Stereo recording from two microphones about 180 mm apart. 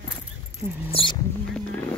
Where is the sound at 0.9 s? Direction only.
30° left (ahead or behind).